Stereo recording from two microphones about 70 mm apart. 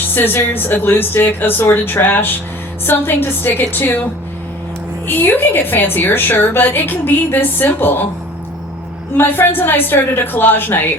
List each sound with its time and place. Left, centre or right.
0.1 s a woman's voice: left
5.0 s a woman's voice: left
9.1 s a woman's voice: left